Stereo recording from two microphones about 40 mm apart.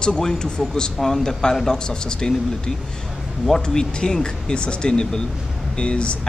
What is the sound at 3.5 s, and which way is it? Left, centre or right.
Speech, centre.